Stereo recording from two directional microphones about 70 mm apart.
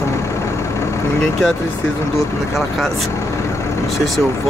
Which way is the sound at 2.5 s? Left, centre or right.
Centre.